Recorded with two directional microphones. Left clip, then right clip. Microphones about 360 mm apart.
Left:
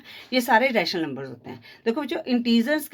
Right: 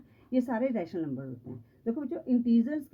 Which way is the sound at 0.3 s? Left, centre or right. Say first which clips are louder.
Left 11 dB; centre.